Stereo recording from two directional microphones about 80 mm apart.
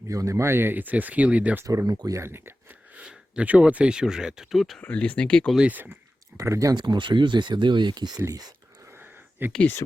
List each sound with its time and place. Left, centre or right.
0.1 s speech: right; by 1.5 s centre
1.6 s speech: right
2.1 s speech: right
2.9 s speech: centre
4.8 s speech: centre
5.5 s speech: centre
6.3 s speech: right
6.7 s speech: right
8.9 s a sound: right
9.6 s speech: left